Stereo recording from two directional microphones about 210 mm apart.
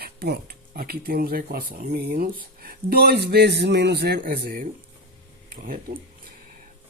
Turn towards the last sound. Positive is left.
turn(degrees=-40)  # may be behind; listen again after turning